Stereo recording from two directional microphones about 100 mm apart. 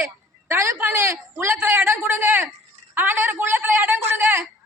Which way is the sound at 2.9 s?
20° right (ahead or behind).